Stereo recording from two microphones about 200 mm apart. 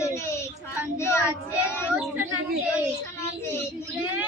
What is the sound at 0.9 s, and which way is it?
Speech, 15° left (ahead or behind).